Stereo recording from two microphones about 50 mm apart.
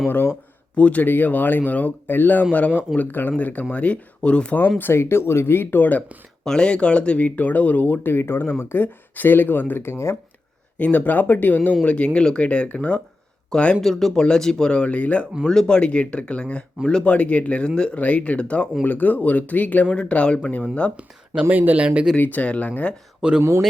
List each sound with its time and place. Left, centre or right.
0.8 s speech: left
1.0 s speech: left
4.8 s speech: left
6.4 s speech: centre
7.3 s speech: left
10.8 s speech: left
13.5 s speech: centre
18.8 s speech: left
21.5 s speech: right
22.2 s speech: left
23.4 s speech: right